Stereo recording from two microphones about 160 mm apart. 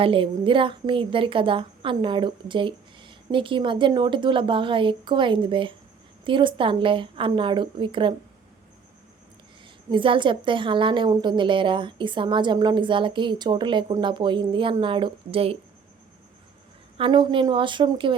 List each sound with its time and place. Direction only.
0.0 s a woman's voice: 35° right (ahead or behind)
9.9 s a woman's voice: 30° right (ahead or behind)
17.0 s a woman's voice: 30° right (ahead or behind)